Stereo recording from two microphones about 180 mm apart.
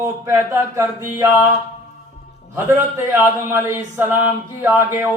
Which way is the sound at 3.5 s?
15° right (ahead or behind).